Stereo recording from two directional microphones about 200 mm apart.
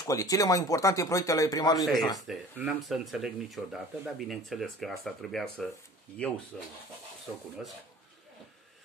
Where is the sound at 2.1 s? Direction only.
5° right (ahead or behind).